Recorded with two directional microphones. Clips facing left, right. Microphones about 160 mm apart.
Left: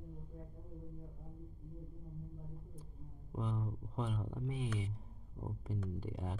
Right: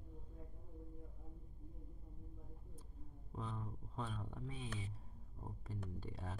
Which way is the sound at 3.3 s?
15° left (ahead or behind).